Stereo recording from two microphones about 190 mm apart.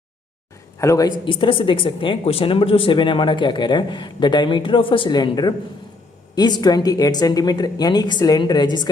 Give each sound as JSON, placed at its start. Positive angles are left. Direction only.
{"t": 0.8, "sound": "a woman's voice", "side_deg": 15}